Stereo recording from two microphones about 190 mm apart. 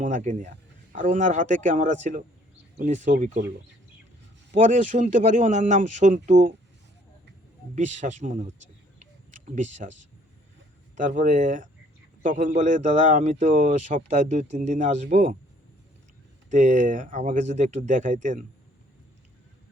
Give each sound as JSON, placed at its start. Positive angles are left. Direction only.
{"t": 0.0, "sound": "a man's voice", "side_deg": -40}
{"t": 4.5, "sound": "a man's voice", "side_deg": -40}
{"t": 7.8, "sound": "a man's voice", "side_deg": -40}
{"t": 16.5, "sound": "a man's voice", "side_deg": -40}